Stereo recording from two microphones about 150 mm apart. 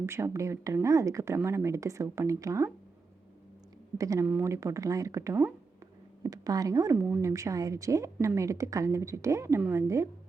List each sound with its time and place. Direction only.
0.0 s speech: 15° right (ahead or behind)
3.9 s speech: 20° right (ahead or behind)